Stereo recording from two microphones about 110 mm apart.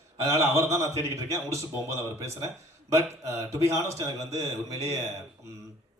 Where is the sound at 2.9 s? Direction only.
30° right (ahead or behind).